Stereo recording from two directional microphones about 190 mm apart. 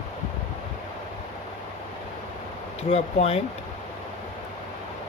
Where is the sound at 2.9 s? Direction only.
30° left (ahead or behind).